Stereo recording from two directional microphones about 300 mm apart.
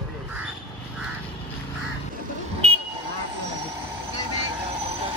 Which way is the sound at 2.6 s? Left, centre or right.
Right.